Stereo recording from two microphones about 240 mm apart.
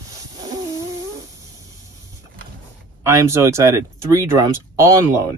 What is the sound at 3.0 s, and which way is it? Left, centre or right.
Speech, centre.